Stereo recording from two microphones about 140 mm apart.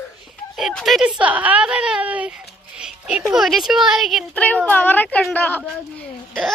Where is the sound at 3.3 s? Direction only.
Centre (ahead or behind).